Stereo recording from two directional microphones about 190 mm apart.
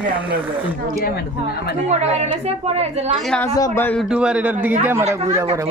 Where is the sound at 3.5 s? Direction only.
15° left (ahead or behind).